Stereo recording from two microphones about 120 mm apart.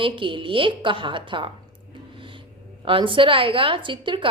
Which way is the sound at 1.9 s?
45° right (ahead or behind).